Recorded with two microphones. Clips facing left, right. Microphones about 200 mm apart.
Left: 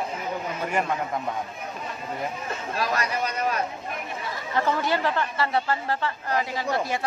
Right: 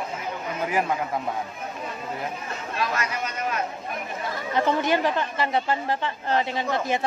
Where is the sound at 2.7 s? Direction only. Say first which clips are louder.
Left 1 dB; 35° left (ahead or behind).